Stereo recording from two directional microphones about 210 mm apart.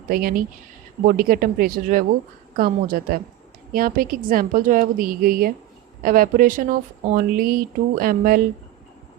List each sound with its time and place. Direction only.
0.1 s speech: 45° right (ahead or behind)